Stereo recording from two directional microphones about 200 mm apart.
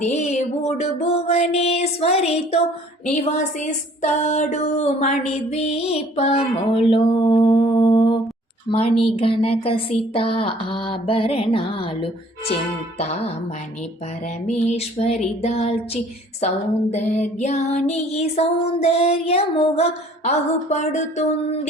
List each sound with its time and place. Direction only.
0.0 s speech: 35° left (ahead or behind)
8.7 s a sound: 30° left (ahead or behind)
13.0 s speech: 30° left (ahead or behind)
14.4 s speech: 35° left (ahead or behind)